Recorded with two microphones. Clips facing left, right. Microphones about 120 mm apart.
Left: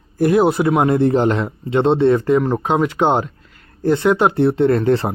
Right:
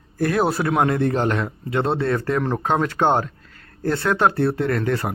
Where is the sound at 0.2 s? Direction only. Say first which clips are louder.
Left 6 dB; 20° left (ahead or behind).